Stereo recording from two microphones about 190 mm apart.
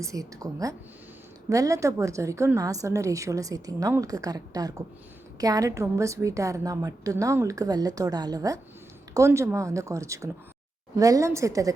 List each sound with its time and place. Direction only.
0.0 s a woman's voice: 15° right (ahead or behind)